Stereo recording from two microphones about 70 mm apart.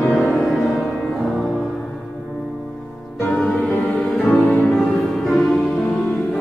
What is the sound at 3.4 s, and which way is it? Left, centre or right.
Music, left.